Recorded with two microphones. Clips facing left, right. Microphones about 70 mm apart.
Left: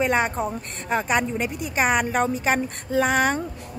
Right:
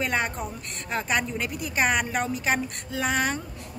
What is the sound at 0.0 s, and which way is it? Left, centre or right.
A woman's voice, left.